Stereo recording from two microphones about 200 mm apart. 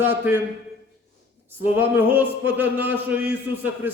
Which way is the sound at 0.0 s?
10° right (ahead or behind).